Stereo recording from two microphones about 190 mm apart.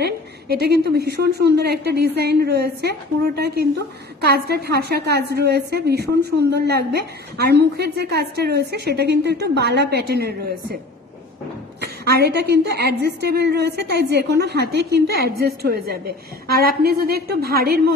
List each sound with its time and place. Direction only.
0.0 s a woman's voice: 55° right (ahead or behind)
11.8 s a woman's voice: 55° right (ahead or behind)